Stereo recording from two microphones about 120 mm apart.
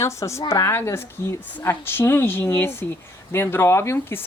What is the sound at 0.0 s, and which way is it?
Speech, 25° left (ahead or behind).